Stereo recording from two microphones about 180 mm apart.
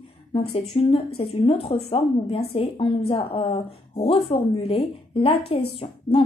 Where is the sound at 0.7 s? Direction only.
35° left (ahead or behind).